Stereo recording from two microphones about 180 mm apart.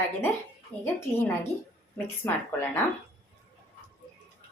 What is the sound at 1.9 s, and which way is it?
Speech, 10° left (ahead or behind).